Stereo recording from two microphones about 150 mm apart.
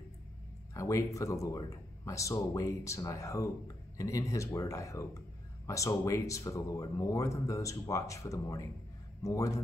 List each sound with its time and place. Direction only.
0.7 s speech: 20° left (ahead or behind)